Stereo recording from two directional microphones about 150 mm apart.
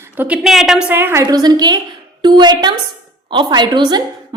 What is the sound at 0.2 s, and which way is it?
A woman's voice, 5° right (ahead or behind).